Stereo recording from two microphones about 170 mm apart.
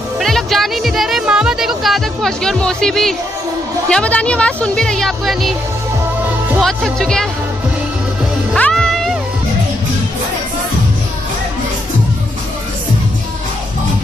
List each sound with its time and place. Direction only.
0.2 s music: centre (ahead or behind)
3.9 s speech: 5° left (ahead or behind)
6.6 s speech: centre (ahead or behind)
8.5 s music: 5° left (ahead or behind)